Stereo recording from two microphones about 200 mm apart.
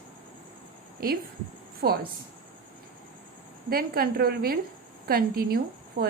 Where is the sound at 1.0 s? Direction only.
45° right (ahead or behind).